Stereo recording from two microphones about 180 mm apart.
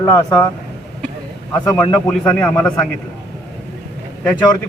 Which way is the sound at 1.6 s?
15° left (ahead or behind).